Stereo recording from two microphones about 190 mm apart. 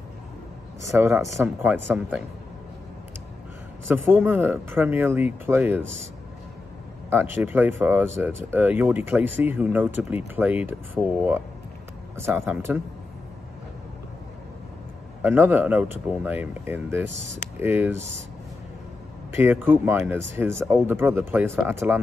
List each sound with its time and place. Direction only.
0.9 s speech: 15° right (ahead or behind)
3.9 s speech: 10° right (ahead or behind)
7.1 s speech: 10° right (ahead or behind)
15.2 s speech: 10° right (ahead or behind)
17.0 s speech: 70° right (ahead or behind)
17.6 s speech: 10° right (ahead or behind)
19.3 s speech: 10° right (ahead or behind)